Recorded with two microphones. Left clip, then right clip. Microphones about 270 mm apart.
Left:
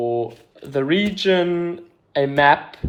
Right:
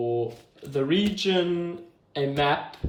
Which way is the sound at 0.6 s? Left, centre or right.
Centre.